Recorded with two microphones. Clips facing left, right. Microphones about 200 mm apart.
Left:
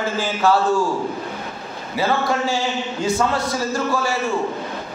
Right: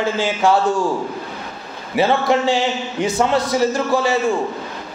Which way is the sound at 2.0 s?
25° right (ahead or behind).